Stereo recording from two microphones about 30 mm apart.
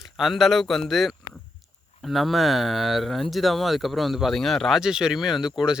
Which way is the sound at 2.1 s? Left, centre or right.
Centre.